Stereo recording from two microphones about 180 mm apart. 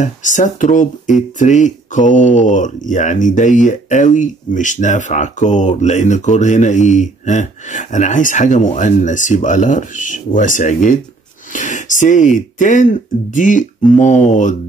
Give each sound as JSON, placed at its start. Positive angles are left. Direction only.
{"t": 0.0, "sound": "speech", "side_deg": 45}